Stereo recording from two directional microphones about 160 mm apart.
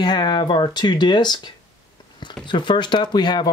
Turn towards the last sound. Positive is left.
turn(degrees=25)  # may be behind; listen again after turning